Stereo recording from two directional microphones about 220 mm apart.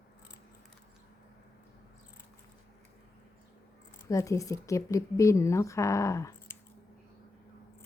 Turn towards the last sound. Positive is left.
turn(degrees=15)  # may be behind; listen again after turning